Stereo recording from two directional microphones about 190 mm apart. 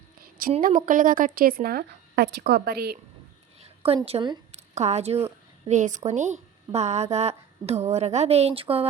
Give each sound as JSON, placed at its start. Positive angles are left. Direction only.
{"t": 0.2, "sound": "a sound", "side_deg": -50}
{"t": 0.9, "sound": "speech", "side_deg": -45}
{"t": 3.8, "sound": "a woman's voice", "side_deg": -30}